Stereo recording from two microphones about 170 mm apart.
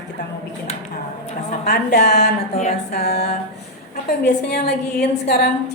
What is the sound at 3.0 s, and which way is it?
Speech, 70° left (ahead or behind).